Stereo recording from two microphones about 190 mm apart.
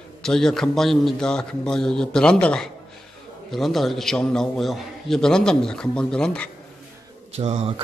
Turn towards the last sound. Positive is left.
turn(degrees=-35)  # may be behind; listen again after turning